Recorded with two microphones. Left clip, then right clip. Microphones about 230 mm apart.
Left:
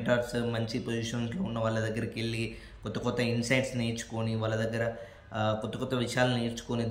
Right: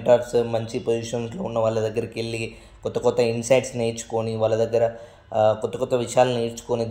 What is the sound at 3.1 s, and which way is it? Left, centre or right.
A man's voice, centre.